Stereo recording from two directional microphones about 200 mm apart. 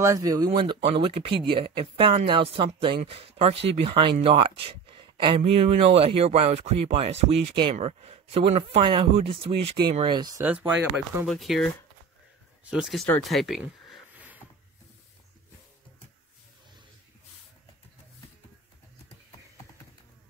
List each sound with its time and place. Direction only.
0.0 s speech: 15° right (ahead or behind)
10.4 s speech: 10° right (ahead or behind)